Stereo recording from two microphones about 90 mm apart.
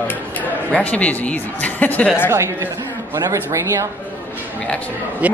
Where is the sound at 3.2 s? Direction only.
35° right (ahead or behind).